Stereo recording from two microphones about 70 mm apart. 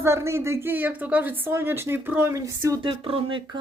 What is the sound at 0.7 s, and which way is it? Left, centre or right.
Speech, right.